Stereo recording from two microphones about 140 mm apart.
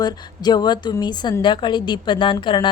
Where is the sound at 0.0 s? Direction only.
30° left (ahead or behind).